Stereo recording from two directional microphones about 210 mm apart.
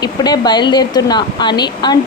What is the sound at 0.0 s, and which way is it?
A woman's voice, 20° left (ahead or behind).